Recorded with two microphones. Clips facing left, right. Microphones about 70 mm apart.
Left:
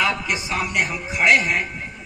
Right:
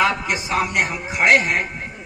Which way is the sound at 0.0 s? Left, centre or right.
Right.